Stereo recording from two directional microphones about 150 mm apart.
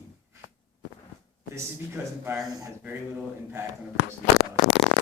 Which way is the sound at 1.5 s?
15° right (ahead or behind).